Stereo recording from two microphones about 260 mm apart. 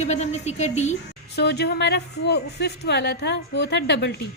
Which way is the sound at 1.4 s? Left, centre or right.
Left.